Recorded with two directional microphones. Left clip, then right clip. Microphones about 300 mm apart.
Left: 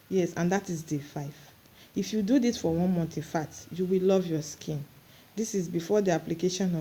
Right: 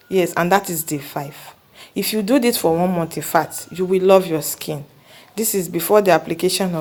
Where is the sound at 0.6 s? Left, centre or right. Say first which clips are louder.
Right 10 dB; right.